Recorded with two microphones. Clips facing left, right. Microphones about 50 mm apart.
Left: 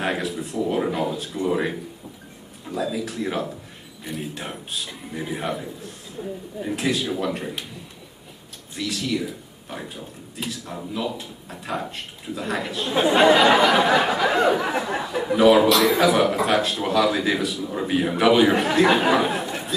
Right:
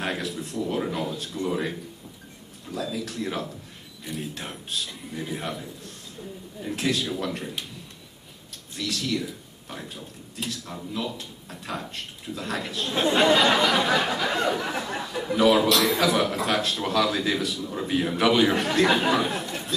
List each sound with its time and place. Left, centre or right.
0.0 s a sound: centre
2.6 s a man's voice: centre
6.2 s speech: left
6.6 s a man's voice: centre
8.7 s a man's voice: centre